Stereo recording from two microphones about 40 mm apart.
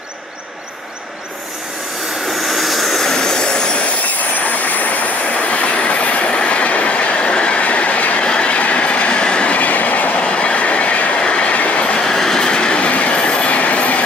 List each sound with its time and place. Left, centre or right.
2.4 s vehicle: centre; by 3.9 s left
4.0 s train: left
5.2 s train: left
9.6 s train: left
10.2 s train: left
11.1 s train: left
11.5 s train: left
12.1 s train: centre; by 14.0 s left